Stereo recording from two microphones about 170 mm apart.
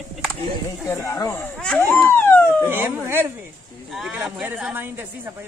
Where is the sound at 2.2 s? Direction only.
15° left (ahead or behind).